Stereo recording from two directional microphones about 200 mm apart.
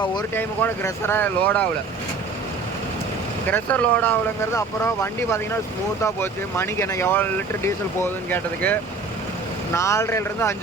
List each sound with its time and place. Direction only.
0.0 s speech: 20° left (ahead or behind)
0.3 s speech: 10° left (ahead or behind)
3.5 s speech: 5° left (ahead or behind)